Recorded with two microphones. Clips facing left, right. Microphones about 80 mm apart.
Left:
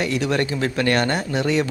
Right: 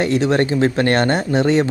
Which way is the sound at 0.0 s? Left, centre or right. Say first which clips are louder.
Right 5 dB; right.